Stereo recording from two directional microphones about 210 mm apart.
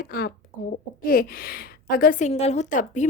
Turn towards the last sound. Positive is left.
turn(degrees=35)  # may be behind; listen again after turning